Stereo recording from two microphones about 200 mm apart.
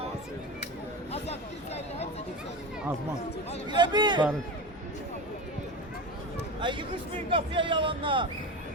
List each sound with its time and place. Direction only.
1.1 s speech: 30° left (ahead or behind)
3.7 s speech: 20° right (ahead or behind)
6.6 s speech: 25° right (ahead or behind)